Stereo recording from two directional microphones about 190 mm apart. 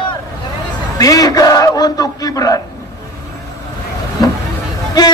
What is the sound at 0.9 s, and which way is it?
A man's voice, 20° left (ahead or behind).